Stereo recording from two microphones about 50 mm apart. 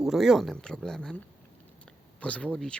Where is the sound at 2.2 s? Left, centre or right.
Left.